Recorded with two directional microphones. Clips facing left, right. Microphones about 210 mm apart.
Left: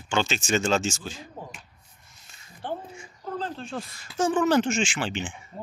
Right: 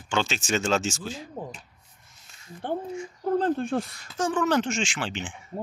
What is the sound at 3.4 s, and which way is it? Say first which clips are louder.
Speech: right 8 dB; 55° right (ahead or behind).